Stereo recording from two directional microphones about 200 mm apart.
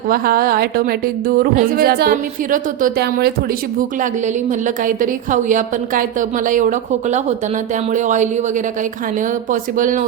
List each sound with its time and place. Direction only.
0.1 s speech: 45° right (ahead or behind)
3.8 s a woman's voice: 40° right (ahead or behind)